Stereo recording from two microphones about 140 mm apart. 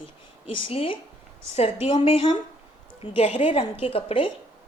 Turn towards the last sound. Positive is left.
turn(degrees=40)  # may be behind; listen again after turning